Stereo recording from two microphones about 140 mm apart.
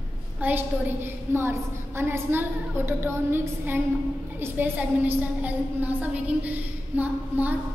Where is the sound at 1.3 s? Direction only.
15° right (ahead or behind).